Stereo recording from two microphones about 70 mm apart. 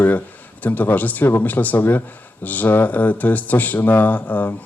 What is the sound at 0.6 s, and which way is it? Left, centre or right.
A man's voice, left.